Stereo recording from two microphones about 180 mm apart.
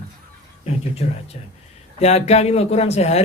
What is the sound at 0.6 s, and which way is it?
A man's voice, 35° left (ahead or behind).